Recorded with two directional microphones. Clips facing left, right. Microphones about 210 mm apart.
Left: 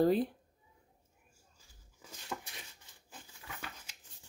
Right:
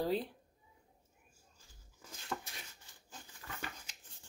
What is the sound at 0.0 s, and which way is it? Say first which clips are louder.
Speech: left 7 dB; 50° left (ahead or behind).